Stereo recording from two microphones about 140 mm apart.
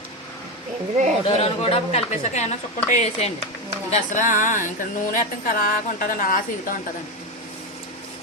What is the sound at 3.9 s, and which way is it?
Speech, 65° left (ahead or behind).